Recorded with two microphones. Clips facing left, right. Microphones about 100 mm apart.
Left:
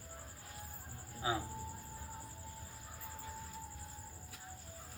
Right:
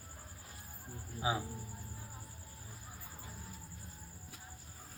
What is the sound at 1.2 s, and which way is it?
Speech, 15° right (ahead or behind).